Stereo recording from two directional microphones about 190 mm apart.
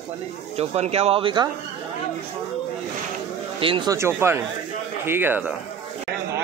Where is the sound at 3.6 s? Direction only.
25° right (ahead or behind); by 5.6 s 10° right (ahead or behind).